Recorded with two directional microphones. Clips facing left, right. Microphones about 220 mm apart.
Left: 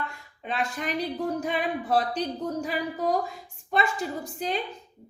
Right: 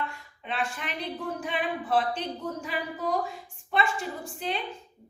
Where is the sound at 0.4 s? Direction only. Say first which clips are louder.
Left 3 dB; 40° left (ahead or behind).